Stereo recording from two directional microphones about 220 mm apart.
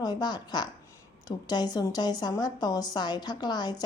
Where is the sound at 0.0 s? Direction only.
20° left (ahead or behind).